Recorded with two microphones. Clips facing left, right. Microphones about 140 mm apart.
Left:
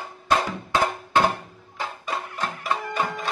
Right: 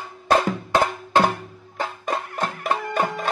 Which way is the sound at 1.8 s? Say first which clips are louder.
Right 4 dB; 50° right (ahead or behind).